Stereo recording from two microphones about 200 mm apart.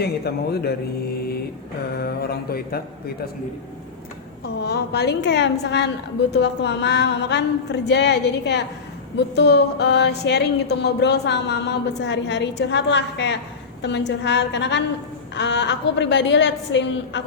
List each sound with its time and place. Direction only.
0.0 s mantra: 55° left (ahead or behind)
1.9 s mantra: 50° left (ahead or behind)
4.4 s speech: 55° left (ahead or behind)